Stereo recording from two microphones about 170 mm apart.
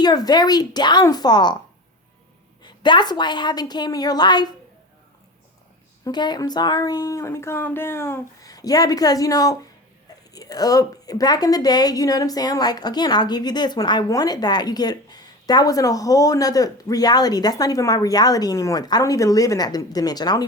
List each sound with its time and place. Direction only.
0.0 s a woman's voice: 25° left (ahead or behind)
2.6 s a woman's voice: 25° left (ahead or behind)
6.1 s a woman's voice: 25° left (ahead or behind)